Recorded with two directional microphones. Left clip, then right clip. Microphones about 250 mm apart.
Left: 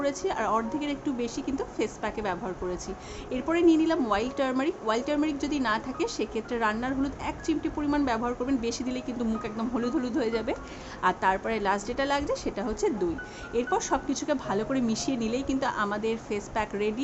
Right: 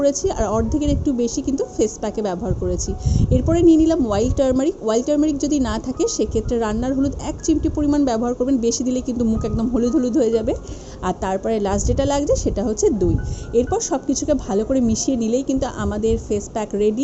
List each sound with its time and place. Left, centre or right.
0.0 s a woman's voice: centre